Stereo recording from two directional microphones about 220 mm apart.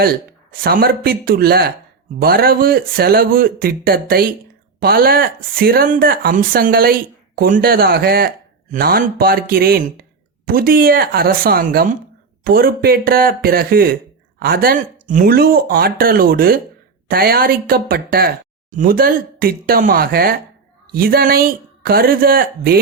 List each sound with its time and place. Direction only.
0.0 s speech: 45° right (ahead or behind)